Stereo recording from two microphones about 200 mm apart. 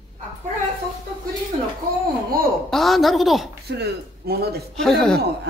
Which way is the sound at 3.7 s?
55° right (ahead or behind).